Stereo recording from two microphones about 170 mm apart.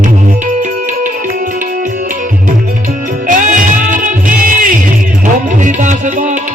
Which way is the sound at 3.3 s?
50° right (ahead or behind).